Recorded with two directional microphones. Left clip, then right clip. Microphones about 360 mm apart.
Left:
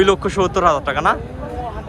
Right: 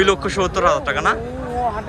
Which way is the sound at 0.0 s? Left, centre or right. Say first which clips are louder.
Left 2 dB; centre.